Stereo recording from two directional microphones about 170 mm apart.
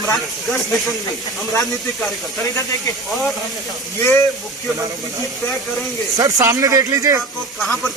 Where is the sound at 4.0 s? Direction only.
15° left (ahead or behind).